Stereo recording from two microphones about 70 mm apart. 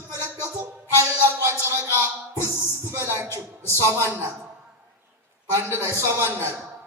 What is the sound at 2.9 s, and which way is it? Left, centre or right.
Music, right.